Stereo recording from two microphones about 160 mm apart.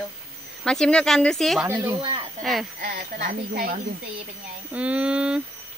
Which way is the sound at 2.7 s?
60° right (ahead or behind).